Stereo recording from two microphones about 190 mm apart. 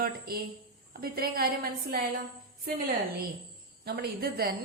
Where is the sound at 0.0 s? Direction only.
50° right (ahead or behind).